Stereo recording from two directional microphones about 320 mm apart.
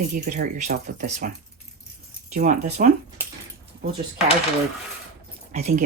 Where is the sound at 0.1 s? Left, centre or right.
Right.